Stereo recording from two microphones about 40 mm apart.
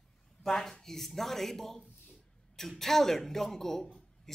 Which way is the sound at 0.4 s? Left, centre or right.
Centre.